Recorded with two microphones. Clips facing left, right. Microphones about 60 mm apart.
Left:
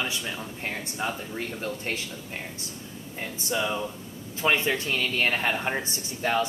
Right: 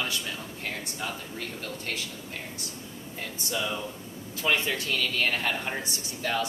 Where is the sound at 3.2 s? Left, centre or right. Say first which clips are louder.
Left 3 dB; left.